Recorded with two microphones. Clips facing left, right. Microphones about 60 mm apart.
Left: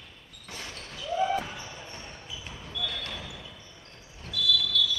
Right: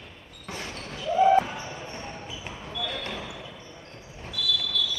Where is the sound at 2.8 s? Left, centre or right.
Right.